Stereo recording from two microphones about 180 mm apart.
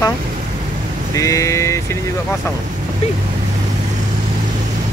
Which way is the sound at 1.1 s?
15° left (ahead or behind).